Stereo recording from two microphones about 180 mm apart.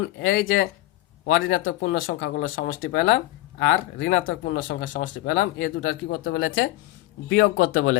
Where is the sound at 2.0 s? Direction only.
55° left (ahead or behind).